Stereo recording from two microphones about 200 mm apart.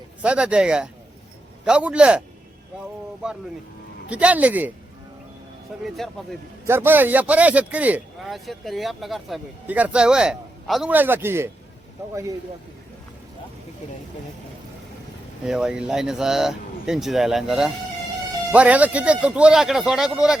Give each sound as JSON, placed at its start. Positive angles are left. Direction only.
{"t": 0.2, "sound": "speech", "side_deg": -5}
{"t": 4.1, "sound": "a man's voice", "side_deg": -5}
{"t": 5.8, "sound": "speech", "side_deg": 0}
{"t": 6.7, "sound": "a man's voice", "side_deg": -10}
{"t": 15.4, "sound": "speech", "side_deg": -5}